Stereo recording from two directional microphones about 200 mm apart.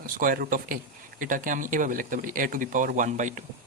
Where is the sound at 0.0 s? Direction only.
45° right (ahead or behind).